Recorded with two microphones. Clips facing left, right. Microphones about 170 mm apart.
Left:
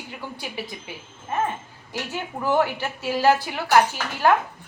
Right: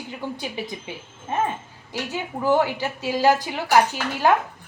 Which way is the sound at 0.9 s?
25° right (ahead or behind).